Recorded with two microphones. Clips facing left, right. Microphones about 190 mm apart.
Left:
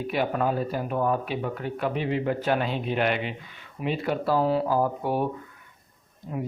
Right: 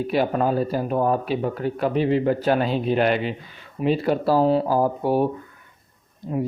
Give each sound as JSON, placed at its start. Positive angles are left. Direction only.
{"t": 0.1, "sound": "speech", "side_deg": -35}